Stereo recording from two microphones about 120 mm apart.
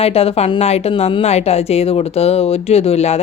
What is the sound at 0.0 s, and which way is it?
Speech, 55° left (ahead or behind).